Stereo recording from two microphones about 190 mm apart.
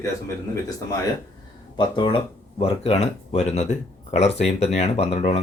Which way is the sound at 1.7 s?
25° left (ahead or behind).